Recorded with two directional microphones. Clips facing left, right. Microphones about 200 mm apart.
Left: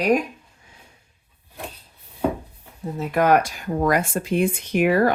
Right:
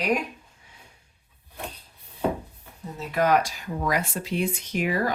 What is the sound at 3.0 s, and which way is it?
Speech, 50° left (ahead or behind).